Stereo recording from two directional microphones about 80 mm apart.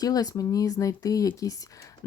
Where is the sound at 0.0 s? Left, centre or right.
Left.